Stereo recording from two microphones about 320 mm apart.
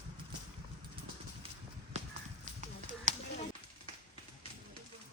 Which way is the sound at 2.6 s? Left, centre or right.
Right.